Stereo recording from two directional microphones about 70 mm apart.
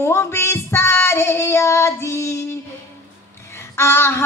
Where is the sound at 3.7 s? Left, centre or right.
Left.